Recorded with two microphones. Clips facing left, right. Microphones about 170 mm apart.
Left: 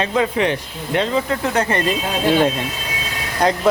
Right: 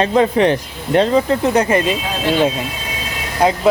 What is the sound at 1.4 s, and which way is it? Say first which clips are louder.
Speech: right 5 dB; 20° right (ahead or behind).